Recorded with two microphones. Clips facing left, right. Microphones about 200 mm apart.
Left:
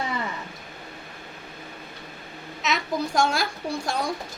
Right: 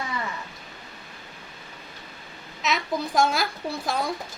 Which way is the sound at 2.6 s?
Centre (ahead or behind).